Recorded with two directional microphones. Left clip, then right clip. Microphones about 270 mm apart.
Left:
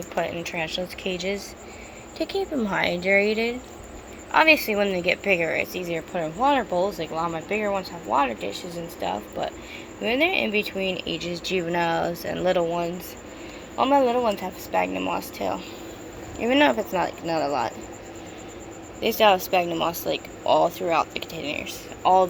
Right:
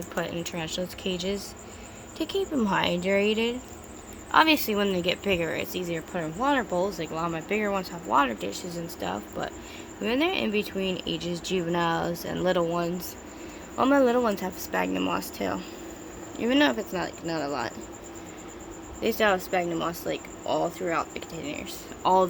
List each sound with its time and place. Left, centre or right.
0.1 s speech: centre
16.4 s speech: centre
19.7 s speech: centre
21.1 s speech: right
22.0 s speech: centre